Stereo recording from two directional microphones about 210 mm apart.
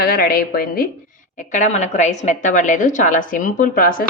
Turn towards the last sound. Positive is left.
turn(degrees=40)  # may be behind; listen again after turning